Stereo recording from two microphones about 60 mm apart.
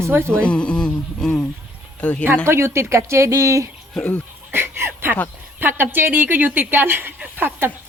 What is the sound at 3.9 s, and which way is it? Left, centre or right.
Speech, left.